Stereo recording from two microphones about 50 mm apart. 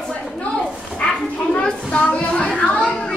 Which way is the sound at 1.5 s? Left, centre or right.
Left.